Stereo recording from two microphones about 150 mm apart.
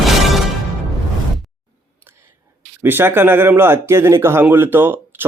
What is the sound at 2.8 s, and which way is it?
Speech, 15° right (ahead or behind).